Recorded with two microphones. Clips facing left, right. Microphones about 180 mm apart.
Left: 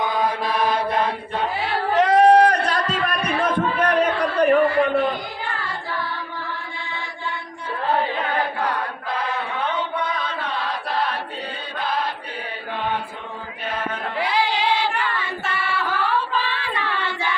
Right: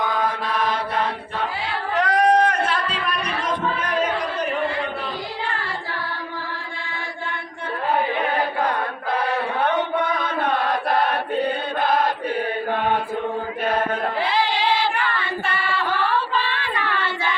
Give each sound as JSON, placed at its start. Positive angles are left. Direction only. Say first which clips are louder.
{"t": 0.0, "sound": "chant", "louder": "left 1 dB", "side_deg": 10}
{"t": 1.9, "sound": "a sound", "louder": "left 4 dB", "side_deg": 25}
{"t": 9.6, "sound": "chant", "louder": "right 4 dB", "side_deg": -55}
{"t": 14.2, "sound": "music", "louder": "left 2 dB", "side_deg": 15}